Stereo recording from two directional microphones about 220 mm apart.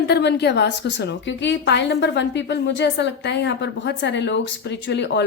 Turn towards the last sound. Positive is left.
turn(degrees=55)  # may be behind; listen again after turning